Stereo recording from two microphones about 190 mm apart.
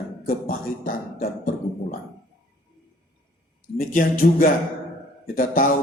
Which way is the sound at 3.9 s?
45° left (ahead or behind).